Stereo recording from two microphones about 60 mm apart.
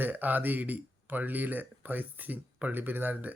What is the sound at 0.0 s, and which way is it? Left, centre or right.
Speech, right.